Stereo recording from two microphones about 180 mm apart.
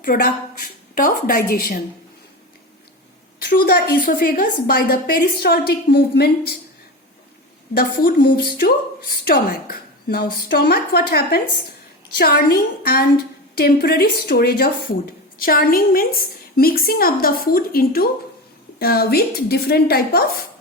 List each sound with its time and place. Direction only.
0.0 s a woman's voice: 55° left (ahead or behind)
3.4 s a woman's voice: 55° left (ahead or behind)
7.8 s a woman's voice: 55° left (ahead or behind)